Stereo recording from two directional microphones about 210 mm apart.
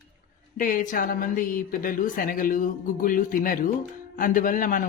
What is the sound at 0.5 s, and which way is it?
Speech, 40° left (ahead or behind).